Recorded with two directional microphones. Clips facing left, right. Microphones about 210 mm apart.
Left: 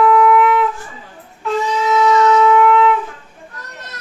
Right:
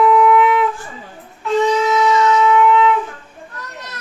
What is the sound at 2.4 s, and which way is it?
Wind instrument, centre (ahead or behind).